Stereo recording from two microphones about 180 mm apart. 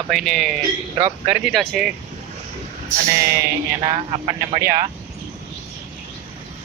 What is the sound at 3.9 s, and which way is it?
Speech, 30° right (ahead or behind).